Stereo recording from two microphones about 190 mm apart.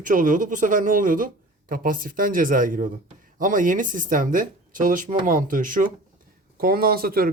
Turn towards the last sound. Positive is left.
turn(degrees=-50)  # may be behind; listen again after turning